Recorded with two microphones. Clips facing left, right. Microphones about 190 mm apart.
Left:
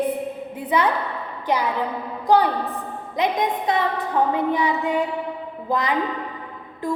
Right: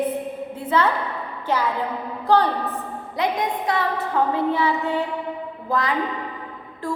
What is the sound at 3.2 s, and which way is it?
Speech, 20° left (ahead or behind).